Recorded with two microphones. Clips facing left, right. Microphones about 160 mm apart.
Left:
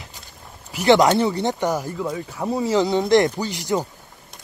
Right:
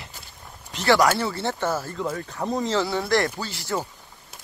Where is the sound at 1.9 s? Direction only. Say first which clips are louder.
Left 2 dB; 5° left (ahead or behind).